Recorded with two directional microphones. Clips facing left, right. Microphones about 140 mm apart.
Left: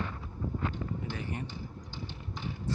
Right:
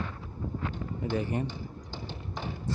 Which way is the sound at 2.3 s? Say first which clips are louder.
Right 1 dB; 45° right (ahead or behind).